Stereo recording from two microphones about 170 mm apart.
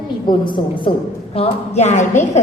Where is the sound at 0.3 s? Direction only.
30° left (ahead or behind).